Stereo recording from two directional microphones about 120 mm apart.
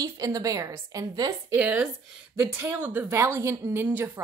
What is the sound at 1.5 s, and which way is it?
A woman's voice, 15° right (ahead or behind).